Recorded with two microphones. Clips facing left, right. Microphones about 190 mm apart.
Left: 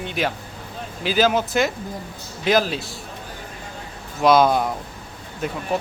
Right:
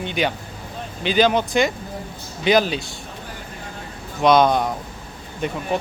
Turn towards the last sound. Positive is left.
turn(degrees=5)  # may be behind; listen again after turning